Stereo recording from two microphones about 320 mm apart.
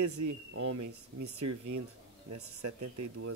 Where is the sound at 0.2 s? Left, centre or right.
Right.